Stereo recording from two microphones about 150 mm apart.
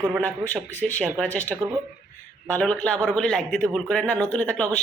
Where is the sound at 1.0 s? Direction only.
Centre (ahead or behind).